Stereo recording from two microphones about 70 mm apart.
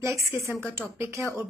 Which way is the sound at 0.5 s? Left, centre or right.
Left.